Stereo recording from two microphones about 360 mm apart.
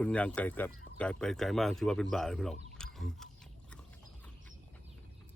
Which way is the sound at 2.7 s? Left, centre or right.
Centre.